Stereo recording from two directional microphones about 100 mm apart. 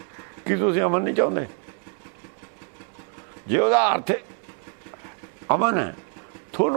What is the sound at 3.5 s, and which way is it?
Speech, 15° right (ahead or behind).